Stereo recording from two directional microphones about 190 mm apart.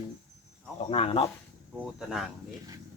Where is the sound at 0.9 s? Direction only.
30° left (ahead or behind).